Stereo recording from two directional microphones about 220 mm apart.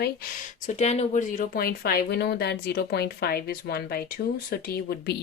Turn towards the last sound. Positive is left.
turn(degrees=45)  # may be behind; listen again after turning